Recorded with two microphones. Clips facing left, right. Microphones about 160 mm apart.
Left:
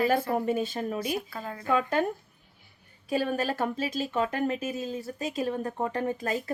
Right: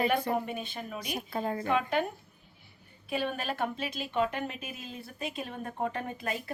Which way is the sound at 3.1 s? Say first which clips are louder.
Left 5 dB; 40° left (ahead or behind).